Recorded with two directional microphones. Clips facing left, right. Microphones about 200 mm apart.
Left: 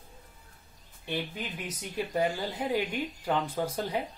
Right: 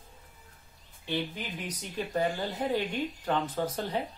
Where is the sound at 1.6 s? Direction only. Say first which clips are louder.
Left 2 dB; 10° left (ahead or behind).